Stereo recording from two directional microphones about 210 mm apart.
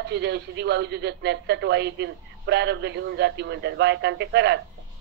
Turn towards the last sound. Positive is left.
turn(degrees=-55)  # may be behind; listen again after turning